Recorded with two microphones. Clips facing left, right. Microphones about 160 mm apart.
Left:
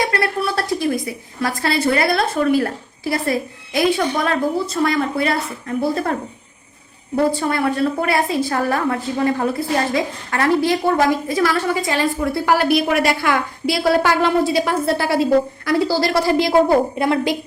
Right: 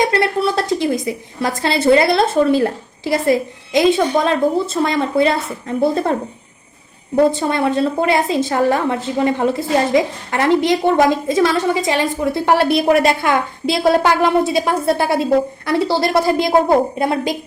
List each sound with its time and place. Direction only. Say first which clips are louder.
0.1 s a woman's voice: right 4 dB; 20° right (ahead or behind)
7.2 s a woman's voice: right 3 dB; 20° right (ahead or behind)